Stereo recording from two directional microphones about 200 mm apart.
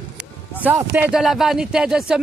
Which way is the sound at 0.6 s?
10° right (ahead or behind).